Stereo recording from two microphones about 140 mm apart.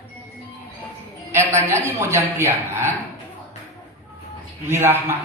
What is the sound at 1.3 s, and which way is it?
Speech, 20° right (ahead or behind).